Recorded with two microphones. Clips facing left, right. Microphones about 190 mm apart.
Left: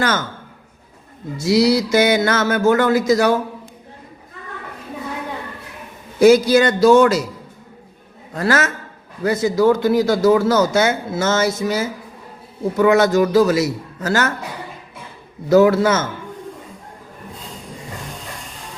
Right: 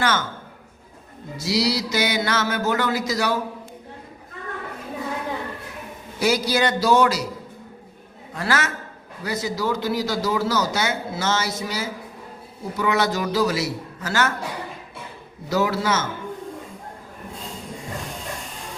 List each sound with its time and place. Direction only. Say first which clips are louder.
0.0 s speech: left 3 dB; 40° left (ahead or behind)
1.4 s speech: left 8 dB; 50° left (ahead or behind)
6.1 s speech: left 10 dB; 50° left (ahead or behind)
8.4 s speech: left 6 dB; 45° left (ahead or behind)
15.4 s speech: left 10 dB; 50° left (ahead or behind)